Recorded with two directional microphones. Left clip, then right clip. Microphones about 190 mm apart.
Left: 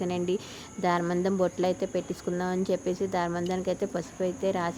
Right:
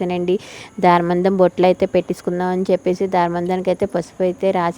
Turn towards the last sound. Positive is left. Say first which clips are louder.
# right 11 dB
turn(degrees=-40)  # may be behind; listen again after turning